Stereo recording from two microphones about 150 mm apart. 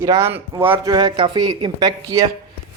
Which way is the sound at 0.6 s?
30° right (ahead or behind).